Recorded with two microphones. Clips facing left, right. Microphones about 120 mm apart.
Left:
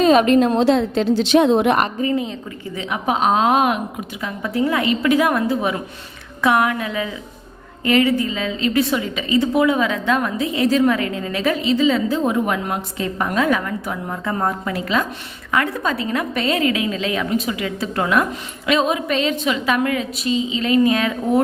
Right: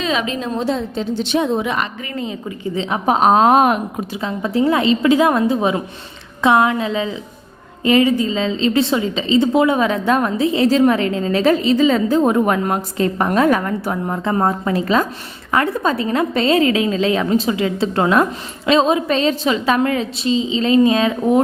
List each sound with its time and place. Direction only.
0.0 s a woman's voice: 50° left (ahead or behind)
2.7 s a woman's voice: 30° right (ahead or behind)
4.2 s a woman's voice: 25° right (ahead or behind)